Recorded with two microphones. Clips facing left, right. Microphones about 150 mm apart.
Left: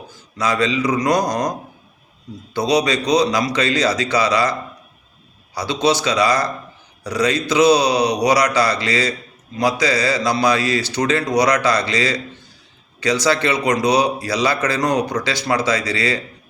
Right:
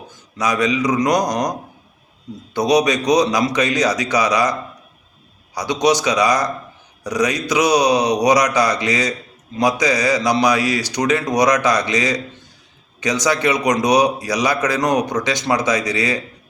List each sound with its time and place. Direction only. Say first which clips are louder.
0.3 s a man's voice: right 1 dB; 15° right (ahead or behind)
5.5 s a man's voice: right 1 dB; 15° right (ahead or behind)